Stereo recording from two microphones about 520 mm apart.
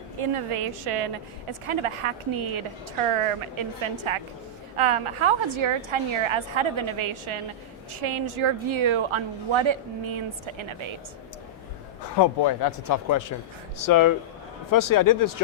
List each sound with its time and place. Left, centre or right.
0.2 s a woman's voice: right
1.6 s a woman's voice: right
3.8 s a woman's voice: right
12.1 s speech: left